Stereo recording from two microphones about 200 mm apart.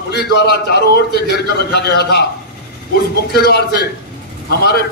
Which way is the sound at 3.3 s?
50° left (ahead or behind).